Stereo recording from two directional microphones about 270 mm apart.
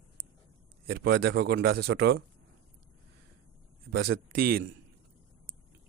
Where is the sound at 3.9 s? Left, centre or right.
Right.